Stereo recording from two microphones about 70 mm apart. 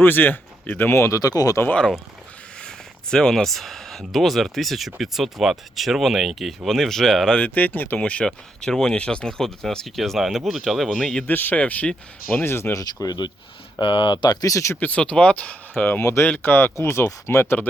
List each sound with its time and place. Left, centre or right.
0.0 s speech: left
0.9 s speech: left
1.2 s speech: left
2.6 s speech: centre
7.3 s speech: left
11.3 s speech: left
12.4 s speech: left
12.8 s speech: left
14.5 s speech: left
14.8 s speech: left
16.0 s speech: left